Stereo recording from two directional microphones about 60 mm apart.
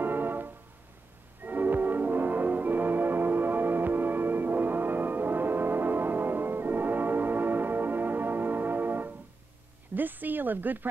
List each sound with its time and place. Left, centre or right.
0.0 s music: right
9.9 s speech: right